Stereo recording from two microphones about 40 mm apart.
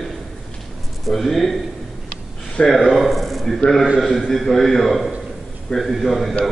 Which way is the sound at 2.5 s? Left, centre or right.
Left.